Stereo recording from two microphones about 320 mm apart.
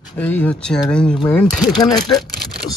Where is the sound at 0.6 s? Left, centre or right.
Centre.